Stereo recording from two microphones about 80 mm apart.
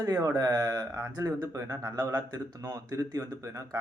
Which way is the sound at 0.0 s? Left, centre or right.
Right.